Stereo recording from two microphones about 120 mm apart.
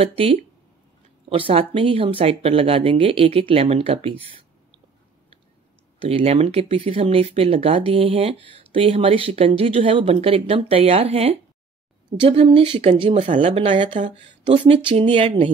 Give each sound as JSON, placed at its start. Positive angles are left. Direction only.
{"t": 0.0, "sound": "speech", "side_deg": -55}
{"t": 5.9, "sound": "speech", "side_deg": -55}
{"t": 14.0, "sound": "speech", "side_deg": -90}
{"t": 14.4, "sound": "speech", "side_deg": -45}